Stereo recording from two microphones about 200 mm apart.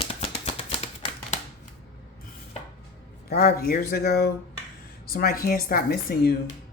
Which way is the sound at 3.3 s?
45° left (ahead or behind).